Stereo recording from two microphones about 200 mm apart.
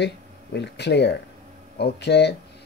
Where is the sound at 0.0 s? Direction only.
55° left (ahead or behind).